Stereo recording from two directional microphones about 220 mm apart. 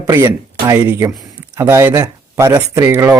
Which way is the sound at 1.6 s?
10° right (ahead or behind).